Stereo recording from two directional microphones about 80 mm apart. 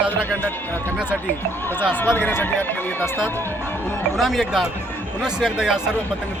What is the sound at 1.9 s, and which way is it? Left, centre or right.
Speech, left.